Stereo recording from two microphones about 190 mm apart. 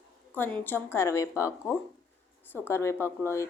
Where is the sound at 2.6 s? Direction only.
15° left (ahead or behind).